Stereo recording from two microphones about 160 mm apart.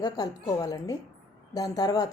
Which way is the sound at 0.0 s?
25° left (ahead or behind).